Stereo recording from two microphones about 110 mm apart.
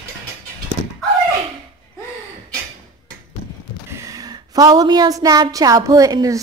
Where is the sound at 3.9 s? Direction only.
30° right (ahead or behind).